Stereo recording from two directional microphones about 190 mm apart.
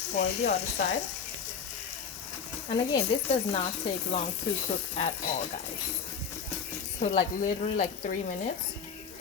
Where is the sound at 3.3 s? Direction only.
35° left (ahead or behind).